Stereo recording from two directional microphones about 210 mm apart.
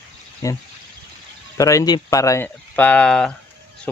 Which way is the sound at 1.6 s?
15° left (ahead or behind).